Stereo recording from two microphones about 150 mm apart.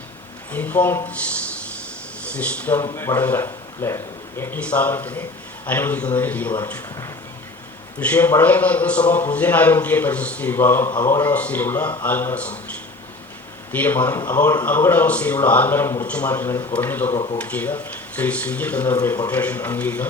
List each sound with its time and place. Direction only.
0.5 s a man's voice: 10° left (ahead or behind)
2.2 s a man's voice: 10° left (ahead or behind)
13.7 s a man's voice: 10° left (ahead or behind)
19.0 s speech: 25° left (ahead or behind)
19.3 s a man's voice: 10° left (ahead or behind)